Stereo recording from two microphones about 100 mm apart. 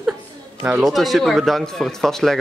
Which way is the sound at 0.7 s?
5° right (ahead or behind).